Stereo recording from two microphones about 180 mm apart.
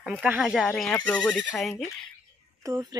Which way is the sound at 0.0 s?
5° right (ahead or behind).